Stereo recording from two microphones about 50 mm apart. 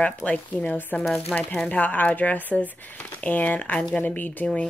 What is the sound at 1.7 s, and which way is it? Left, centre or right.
Speech, left.